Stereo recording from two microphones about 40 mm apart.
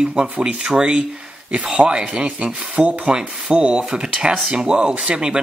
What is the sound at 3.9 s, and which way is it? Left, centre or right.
Speech, centre.